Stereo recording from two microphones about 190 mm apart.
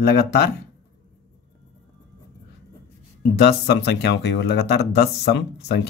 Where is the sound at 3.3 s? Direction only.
60° left (ahead or behind).